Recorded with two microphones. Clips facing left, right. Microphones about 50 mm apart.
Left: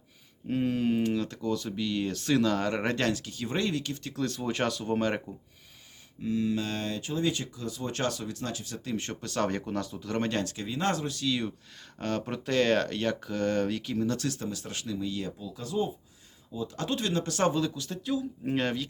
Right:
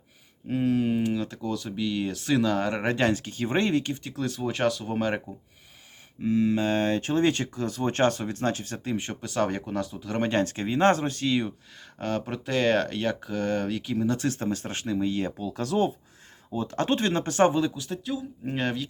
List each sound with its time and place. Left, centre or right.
0.4 s speech: centre
3.1 s speech: right
4.1 s speech: centre
6.2 s speech: right
9.0 s speech: centre
10.3 s speech: right
11.9 s speech: centre
14.2 s speech: right
15.4 s speech: right
16.5 s speech: right
17.7 s speech: centre